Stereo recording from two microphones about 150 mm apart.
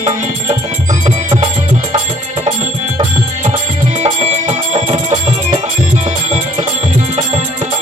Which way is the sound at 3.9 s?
50° right (ahead or behind).